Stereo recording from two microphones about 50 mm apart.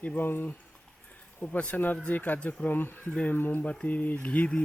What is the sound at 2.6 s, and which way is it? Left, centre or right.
Speech, left.